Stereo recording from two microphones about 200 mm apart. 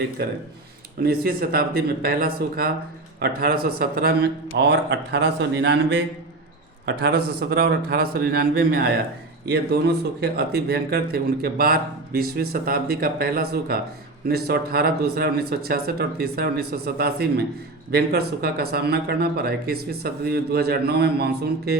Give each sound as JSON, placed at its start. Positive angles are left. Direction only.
{"t": 1.0, "sound": "a man's voice", "side_deg": -50}